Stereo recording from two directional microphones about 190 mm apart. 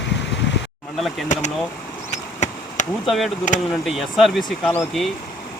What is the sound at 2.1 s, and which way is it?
Insect, 40° left (ahead or behind).